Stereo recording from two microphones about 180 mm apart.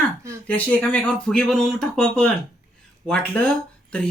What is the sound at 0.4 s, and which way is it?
Speech, 10° left (ahead or behind).